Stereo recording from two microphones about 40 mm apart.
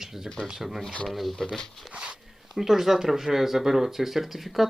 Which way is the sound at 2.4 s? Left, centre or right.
Centre.